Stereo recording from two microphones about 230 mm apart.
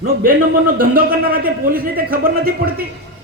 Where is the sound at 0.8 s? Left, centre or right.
Right.